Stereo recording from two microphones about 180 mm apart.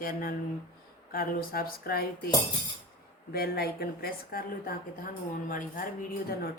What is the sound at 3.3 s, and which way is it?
Speech, 60° left (ahead or behind).